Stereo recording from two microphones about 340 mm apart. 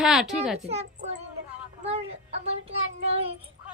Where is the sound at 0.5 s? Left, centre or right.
Centre.